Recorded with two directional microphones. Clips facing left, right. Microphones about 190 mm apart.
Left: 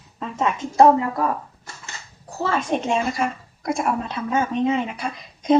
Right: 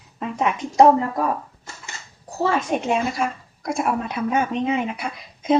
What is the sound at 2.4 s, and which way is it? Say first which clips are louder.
A woman's voice: right 1 dB; 10° right (ahead or behind).